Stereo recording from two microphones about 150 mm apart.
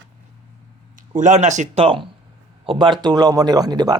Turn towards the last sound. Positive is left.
turn(degrees=-25)  # may be behind; listen again after turning